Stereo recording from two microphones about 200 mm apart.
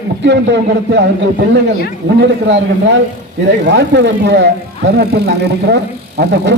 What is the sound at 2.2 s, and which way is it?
Speech, 60° right (ahead or behind).